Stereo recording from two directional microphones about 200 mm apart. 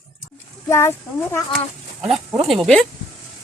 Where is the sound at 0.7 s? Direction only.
15° left (ahead or behind).